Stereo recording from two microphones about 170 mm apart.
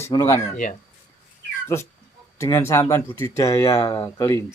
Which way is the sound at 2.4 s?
15° left (ahead or behind).